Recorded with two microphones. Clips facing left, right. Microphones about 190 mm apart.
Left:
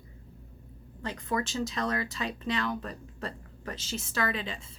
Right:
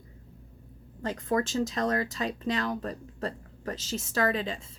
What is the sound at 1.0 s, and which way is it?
Speech, 45° right (ahead or behind).